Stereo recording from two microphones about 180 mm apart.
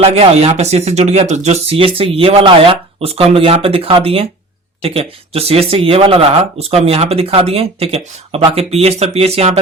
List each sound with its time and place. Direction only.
0.0 s speech: 35° right (ahead or behind)